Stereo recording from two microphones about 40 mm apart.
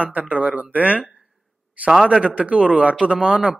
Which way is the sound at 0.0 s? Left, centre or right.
Right.